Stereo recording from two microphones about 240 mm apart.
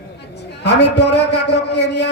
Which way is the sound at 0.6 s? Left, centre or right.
Left.